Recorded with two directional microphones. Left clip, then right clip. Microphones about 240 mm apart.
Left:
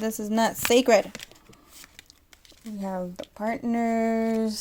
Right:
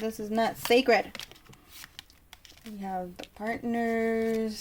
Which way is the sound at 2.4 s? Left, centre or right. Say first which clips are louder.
Left 3 dB; left.